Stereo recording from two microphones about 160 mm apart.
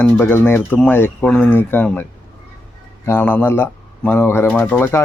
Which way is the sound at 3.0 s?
10° left (ahead or behind).